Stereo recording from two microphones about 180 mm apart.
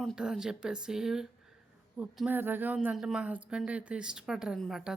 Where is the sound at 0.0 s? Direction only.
Centre (ahead or behind).